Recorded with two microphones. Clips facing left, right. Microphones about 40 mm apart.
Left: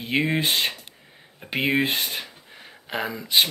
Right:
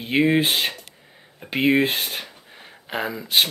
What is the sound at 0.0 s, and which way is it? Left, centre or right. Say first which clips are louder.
Speech: right 4 dB; centre.